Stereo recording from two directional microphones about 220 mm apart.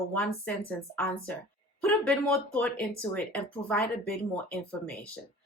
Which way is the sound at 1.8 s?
5° left (ahead or behind).